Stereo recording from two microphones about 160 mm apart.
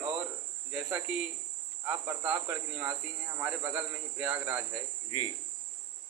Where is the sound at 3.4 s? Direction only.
10° right (ahead or behind).